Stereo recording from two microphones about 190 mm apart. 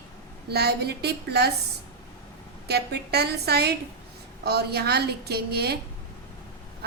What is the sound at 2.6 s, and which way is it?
A woman's voice, 60° right (ahead or behind).